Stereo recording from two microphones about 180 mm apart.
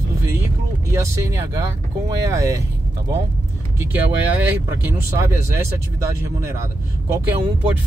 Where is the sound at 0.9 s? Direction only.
15° right (ahead or behind).